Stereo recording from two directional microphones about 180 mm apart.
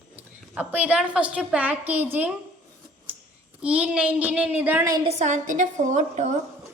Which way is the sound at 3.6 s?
5° right (ahead or behind).